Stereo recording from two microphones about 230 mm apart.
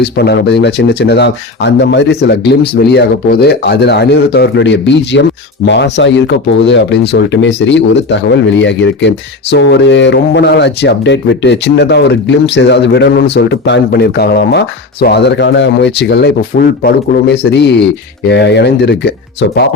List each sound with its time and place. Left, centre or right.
0.0 s speech: left